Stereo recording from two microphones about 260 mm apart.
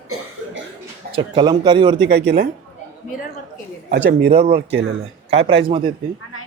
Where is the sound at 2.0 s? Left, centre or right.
Right.